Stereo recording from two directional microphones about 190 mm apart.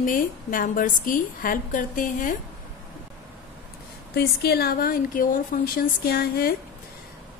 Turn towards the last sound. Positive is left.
turn(degrees=55)  # may be behind; listen again after turning